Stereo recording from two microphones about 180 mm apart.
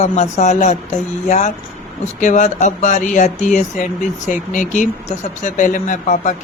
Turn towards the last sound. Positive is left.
turn(degrees=45)  # may be behind; listen again after turning